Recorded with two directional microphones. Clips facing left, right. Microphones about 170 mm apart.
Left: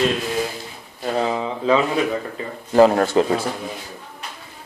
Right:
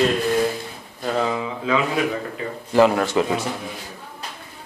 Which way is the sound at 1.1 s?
25° left (ahead or behind).